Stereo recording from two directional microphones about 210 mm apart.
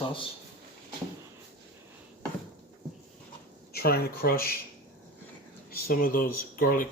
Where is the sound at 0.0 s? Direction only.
25° left (ahead or behind).